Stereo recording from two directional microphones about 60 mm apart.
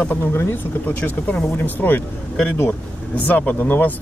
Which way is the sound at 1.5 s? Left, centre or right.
Left.